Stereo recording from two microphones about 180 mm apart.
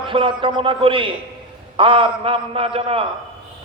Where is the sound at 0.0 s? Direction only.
30° right (ahead or behind).